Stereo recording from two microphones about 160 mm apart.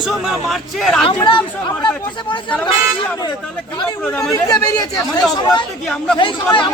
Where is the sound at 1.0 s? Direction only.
35° left (ahead or behind).